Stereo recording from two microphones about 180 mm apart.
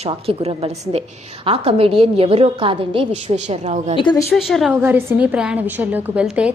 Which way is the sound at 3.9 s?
25° left (ahead or behind).